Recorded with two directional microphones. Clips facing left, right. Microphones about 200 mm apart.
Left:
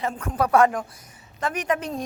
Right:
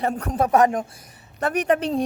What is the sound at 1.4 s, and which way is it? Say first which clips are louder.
Speech: right 5 dB; 60° right (ahead or behind).